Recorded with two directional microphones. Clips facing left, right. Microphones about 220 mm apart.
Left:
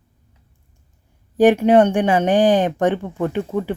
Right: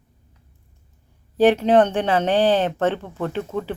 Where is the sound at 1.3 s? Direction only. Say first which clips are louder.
Left 3 dB; 15° left (ahead or behind).